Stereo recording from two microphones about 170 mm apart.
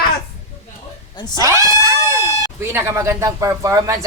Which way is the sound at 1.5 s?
20° right (ahead or behind).